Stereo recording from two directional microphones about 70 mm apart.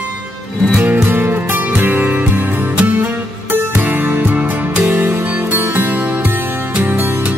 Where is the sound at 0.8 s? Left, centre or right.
Right.